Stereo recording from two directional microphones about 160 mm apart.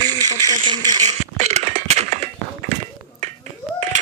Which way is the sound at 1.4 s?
40° right (ahead or behind).